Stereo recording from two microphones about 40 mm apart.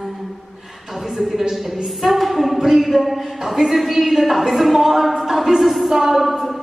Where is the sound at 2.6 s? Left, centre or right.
Centre.